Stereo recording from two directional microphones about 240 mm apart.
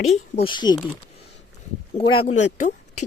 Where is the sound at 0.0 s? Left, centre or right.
Left.